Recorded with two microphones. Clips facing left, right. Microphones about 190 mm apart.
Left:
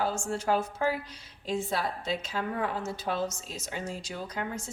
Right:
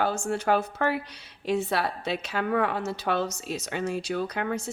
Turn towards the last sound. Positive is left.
turn(degrees=-70)  # may be behind; listen again after turning